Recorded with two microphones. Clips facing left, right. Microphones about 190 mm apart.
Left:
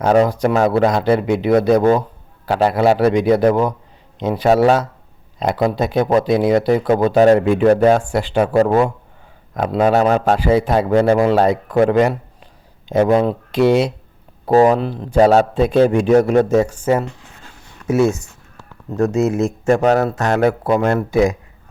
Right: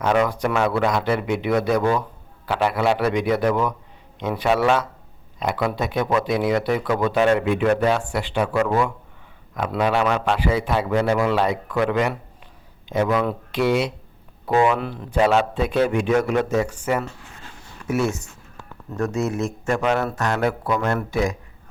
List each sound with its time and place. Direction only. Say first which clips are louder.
0.0 s speech: left 6 dB; 40° left (ahead or behind)
16.8 s speech: left 6 dB; 25° left (ahead or behind)
19.6 s speech: left 8 dB; 45° left (ahead or behind)